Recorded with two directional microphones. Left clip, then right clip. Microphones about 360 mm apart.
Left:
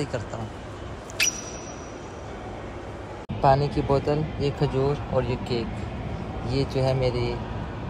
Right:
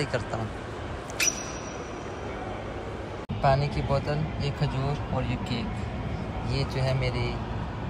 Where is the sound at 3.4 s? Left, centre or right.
Centre.